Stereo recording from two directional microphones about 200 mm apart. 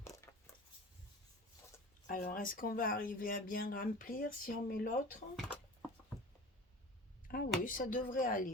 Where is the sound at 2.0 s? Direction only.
45° left (ahead or behind).